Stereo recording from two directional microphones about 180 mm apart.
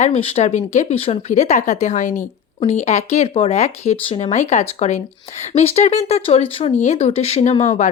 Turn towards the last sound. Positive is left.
turn(degrees=40)  # may be behind; listen again after turning